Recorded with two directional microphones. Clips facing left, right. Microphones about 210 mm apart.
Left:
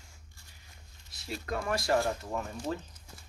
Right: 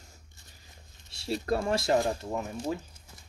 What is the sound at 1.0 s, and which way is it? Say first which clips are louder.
Speech: right 8 dB; 30° right (ahead or behind).